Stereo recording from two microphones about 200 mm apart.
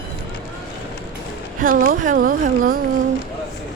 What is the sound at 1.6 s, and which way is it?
Speech, 45° right (ahead or behind).